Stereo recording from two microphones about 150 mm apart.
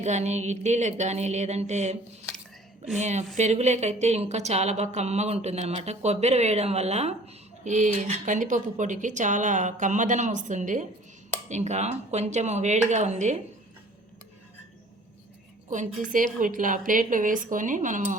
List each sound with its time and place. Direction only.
0.0 s speech: 50° right (ahead or behind)
3.0 s a woman's voice: 50° right (ahead or behind)
15.7 s a woman's voice: 60° right (ahead or behind)